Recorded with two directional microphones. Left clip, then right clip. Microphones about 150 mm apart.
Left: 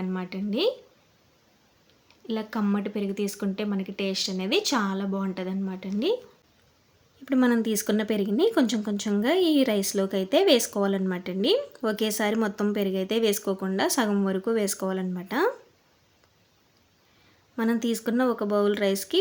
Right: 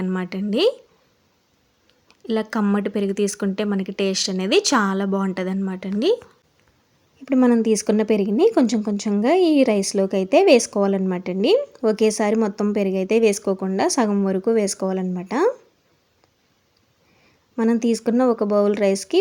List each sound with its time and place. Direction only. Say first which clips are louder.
0.0 s speech: right 6 dB; 50° right (ahead or behind)
2.2 s speech: right 7 dB; 50° right (ahead or behind)
7.3 s speech: right 7 dB; 10° right (ahead or behind)
17.6 s speech: right 7 dB; 15° right (ahead or behind)